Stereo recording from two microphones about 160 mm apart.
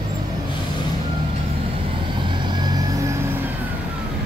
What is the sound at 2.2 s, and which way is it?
Vehicle, 30° right (ahead or behind).